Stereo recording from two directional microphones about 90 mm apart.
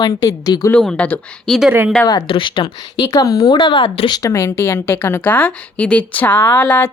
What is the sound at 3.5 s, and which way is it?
Speech, 60° left (ahead or behind).